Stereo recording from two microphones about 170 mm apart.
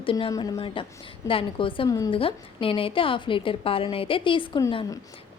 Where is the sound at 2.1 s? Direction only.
30° left (ahead or behind).